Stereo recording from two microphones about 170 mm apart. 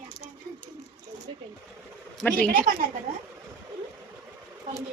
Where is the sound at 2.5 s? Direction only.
55° right (ahead or behind).